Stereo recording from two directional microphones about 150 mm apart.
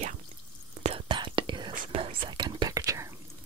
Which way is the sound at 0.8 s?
35° right (ahead or behind).